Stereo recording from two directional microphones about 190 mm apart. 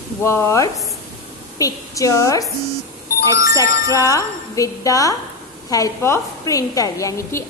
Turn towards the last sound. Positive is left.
turn(degrees=15)  # may be behind; listen again after turning